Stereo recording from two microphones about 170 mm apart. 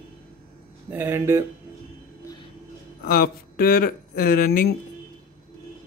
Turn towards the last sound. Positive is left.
turn(degrees=55)  # may be behind; listen again after turning